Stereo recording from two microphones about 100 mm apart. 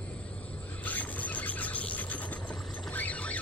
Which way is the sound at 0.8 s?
15° left (ahead or behind).